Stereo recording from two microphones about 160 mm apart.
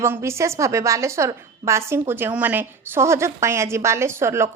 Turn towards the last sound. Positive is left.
turn(degrees=-15)  # may be behind; listen again after turning